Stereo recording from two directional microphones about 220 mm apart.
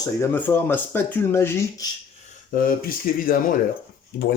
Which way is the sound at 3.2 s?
40° left (ahead or behind).